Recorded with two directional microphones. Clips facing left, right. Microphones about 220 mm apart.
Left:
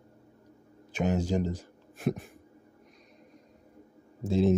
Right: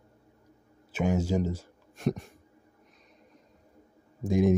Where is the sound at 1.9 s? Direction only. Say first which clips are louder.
Right 1 dB; centre (ahead or behind).